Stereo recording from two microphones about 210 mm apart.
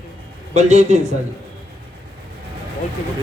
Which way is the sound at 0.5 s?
35° right (ahead or behind).